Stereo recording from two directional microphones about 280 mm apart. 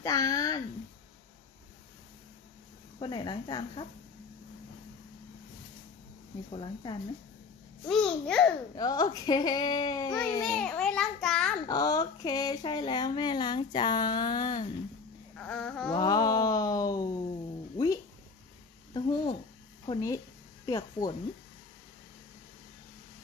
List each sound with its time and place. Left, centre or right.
0.0 s speech: centre
3.0 s speech: centre
6.5 s speech: centre
7.9 s a child's voice: centre
8.7 s speech: centre
11.6 s speech: centre
15.3 s babbling: centre
15.9 s speech: centre
18.9 s speech: centre